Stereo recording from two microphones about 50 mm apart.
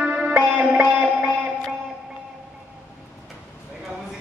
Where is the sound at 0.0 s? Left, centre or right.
Right.